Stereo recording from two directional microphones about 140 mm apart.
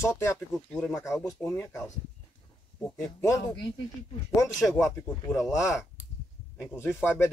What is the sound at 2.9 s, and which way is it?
Speech, 20° left (ahead or behind).